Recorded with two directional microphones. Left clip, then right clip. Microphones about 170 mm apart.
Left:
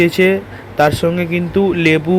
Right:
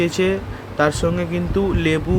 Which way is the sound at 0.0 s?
15° left (ahead or behind).